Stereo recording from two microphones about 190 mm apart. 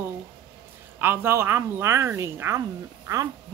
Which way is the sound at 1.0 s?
15° right (ahead or behind).